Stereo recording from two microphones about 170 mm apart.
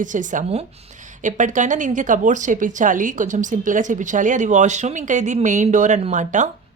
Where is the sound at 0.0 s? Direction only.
50° right (ahead or behind).